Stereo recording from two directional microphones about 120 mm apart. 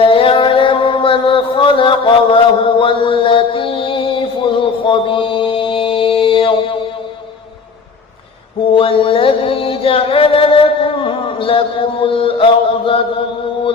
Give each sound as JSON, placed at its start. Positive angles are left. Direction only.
{"t": 0.0, "sound": "mantra", "side_deg": 50}
{"t": 8.7, "sound": "music", "side_deg": 50}